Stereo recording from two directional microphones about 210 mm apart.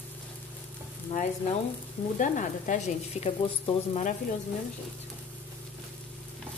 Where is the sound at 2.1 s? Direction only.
40° left (ahead or behind).